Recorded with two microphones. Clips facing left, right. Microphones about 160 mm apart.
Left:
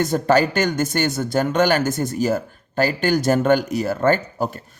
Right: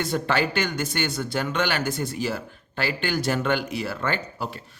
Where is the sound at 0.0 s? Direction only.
45° left (ahead or behind).